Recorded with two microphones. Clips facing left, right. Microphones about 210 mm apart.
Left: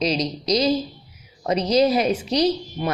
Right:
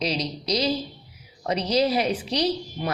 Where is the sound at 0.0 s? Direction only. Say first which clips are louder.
Left 4 dB; 25° left (ahead or behind).